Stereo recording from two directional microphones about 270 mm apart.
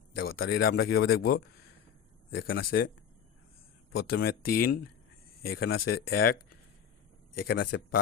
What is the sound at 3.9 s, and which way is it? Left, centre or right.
Speech, left.